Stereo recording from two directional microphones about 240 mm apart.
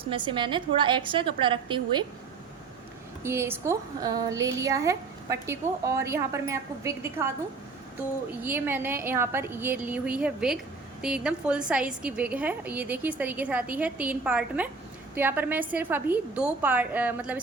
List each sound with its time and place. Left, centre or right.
0.1 s a woman's voice: centre
3.2 s speech: centre
8.4 s a woman's voice: centre